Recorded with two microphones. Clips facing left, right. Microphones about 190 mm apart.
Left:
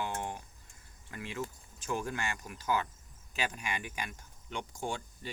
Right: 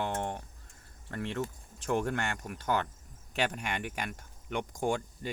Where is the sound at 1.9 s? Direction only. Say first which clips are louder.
Right 5 dB; 65° right (ahead or behind).